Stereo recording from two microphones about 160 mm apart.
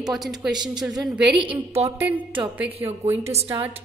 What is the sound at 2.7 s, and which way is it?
Speech, 40° right (ahead or behind).